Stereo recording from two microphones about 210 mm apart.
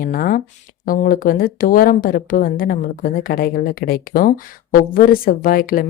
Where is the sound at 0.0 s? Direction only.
40° left (ahead or behind).